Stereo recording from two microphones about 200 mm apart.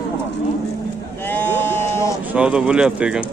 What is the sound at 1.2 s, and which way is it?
Sheep, 10° left (ahead or behind).